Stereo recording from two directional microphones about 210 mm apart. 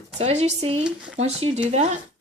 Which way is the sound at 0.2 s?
30° right (ahead or behind).